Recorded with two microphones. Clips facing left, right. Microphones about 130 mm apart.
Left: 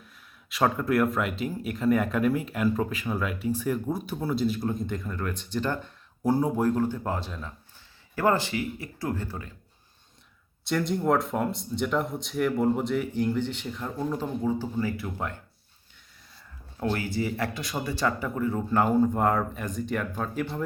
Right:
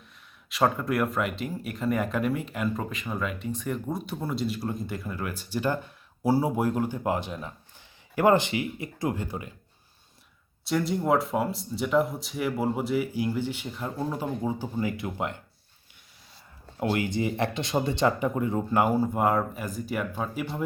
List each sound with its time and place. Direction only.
0.5 s speech: centre (ahead or behind)
10.6 s speech: centre (ahead or behind); by 15.4 s 20° right (ahead or behind)
16.9 s speech: 20° right (ahead or behind)